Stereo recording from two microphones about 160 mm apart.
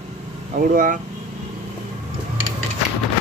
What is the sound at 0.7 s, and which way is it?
Speech, 55° right (ahead or behind).